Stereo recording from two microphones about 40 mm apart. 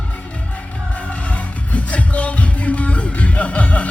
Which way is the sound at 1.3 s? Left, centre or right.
Left.